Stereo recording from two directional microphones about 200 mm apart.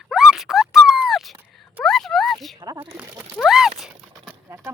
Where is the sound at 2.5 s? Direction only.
20° right (ahead or behind).